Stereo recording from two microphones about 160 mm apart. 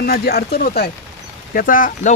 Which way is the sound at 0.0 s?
75° left (ahead or behind).